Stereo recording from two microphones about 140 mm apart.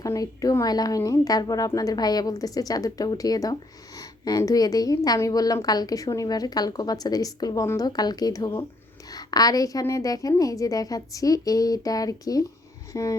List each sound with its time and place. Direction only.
0.0 s speech: 25° left (ahead or behind)